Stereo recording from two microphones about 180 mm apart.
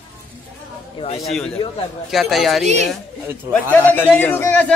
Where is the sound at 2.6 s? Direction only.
40° right (ahead or behind).